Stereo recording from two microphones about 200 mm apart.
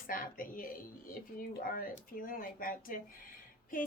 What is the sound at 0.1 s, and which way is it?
A woman's voice, 45° left (ahead or behind).